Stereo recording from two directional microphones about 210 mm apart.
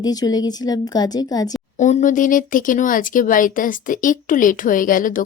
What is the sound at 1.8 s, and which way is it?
Speech, 35° left (ahead or behind).